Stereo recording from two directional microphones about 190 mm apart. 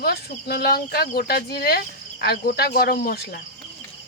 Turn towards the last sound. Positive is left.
turn(degrees=55)  # may be behind; listen again after turning